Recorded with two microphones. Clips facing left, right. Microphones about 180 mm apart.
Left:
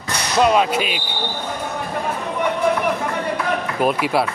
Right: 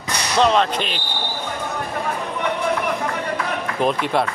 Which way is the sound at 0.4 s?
10° left (ahead or behind).